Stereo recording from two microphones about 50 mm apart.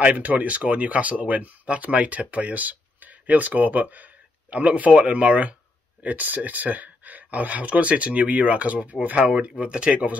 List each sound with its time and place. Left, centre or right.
0.1 s speech: right